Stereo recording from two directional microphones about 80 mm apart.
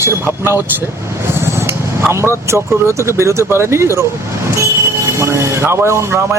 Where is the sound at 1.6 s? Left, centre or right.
Right.